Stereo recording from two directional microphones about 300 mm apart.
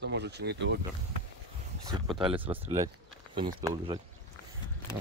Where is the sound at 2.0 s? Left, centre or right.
Centre.